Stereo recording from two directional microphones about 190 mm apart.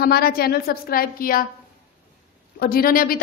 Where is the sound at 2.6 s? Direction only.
50° left (ahead or behind).